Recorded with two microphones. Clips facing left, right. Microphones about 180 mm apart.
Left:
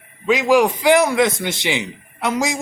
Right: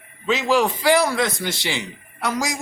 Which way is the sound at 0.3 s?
15° left (ahead or behind).